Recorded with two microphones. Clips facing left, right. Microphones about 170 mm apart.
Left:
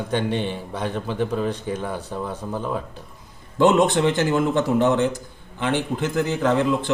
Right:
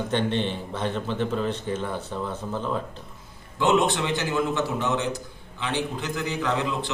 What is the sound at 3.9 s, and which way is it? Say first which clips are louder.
A man's voice: left 6 dB; 50° left (ahead or behind).